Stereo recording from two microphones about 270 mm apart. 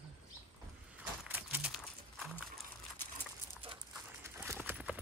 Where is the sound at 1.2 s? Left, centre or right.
Centre.